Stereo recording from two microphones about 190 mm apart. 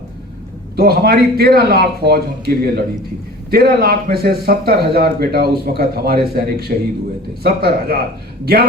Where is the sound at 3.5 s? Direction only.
55° right (ahead or behind).